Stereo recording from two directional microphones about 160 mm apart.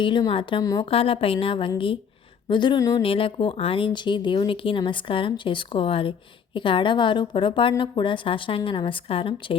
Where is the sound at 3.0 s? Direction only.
35° left (ahead or behind).